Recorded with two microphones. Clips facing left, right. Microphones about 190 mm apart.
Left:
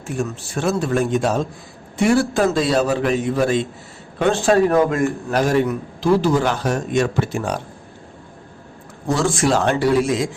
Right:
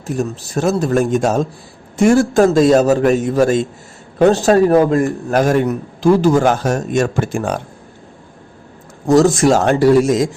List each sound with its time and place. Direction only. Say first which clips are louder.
0.1 s a man's voice: right 4 dB; 40° right (ahead or behind)
9.0 s speech: right 8 dB; 40° right (ahead or behind)